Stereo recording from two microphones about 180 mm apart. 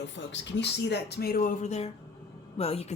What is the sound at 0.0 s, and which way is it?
A woman's voice, 80° left.